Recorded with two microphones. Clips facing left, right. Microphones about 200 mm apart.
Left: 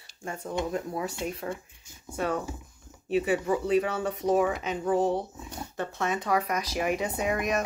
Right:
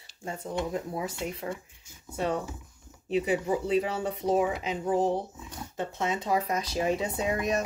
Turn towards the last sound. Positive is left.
turn(degrees=-25)  # may be behind; listen again after turning